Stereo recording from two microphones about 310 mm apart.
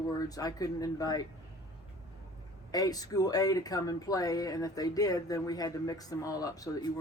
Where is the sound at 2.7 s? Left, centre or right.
Centre.